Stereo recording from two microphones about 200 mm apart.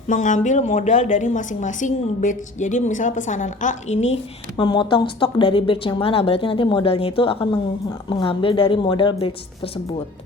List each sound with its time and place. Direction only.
0.1 s a woman's voice: 40° left (ahead or behind)